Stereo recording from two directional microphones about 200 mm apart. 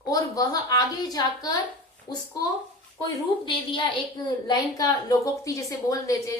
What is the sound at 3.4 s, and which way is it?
A woman's voice, 25° left (ahead or behind).